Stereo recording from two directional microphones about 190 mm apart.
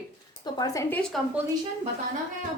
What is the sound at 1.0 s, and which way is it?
Speech, centre (ahead or behind).